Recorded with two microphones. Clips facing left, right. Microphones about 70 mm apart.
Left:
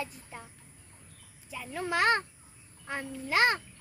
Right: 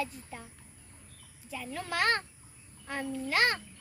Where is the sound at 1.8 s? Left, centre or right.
Centre.